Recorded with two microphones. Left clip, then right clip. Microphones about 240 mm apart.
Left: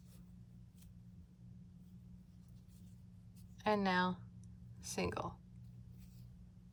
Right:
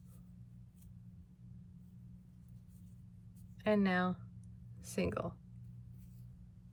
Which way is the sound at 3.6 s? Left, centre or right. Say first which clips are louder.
Right 1 dB; centre.